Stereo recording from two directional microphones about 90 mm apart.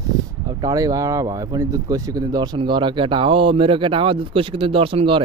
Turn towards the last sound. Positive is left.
turn(degrees=-80)